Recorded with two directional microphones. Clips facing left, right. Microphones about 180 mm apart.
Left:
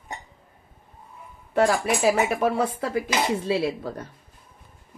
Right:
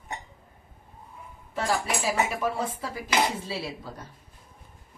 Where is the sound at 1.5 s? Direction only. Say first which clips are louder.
Left 7 dB; 60° left (ahead or behind).